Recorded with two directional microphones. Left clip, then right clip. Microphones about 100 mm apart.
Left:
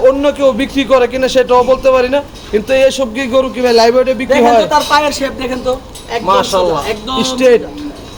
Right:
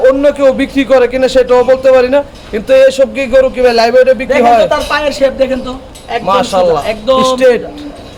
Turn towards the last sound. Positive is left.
turn(degrees=-55)  # may be behind; listen again after turning